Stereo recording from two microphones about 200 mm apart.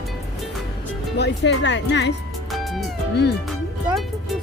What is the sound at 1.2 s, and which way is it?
Speech, 60° left (ahead or behind).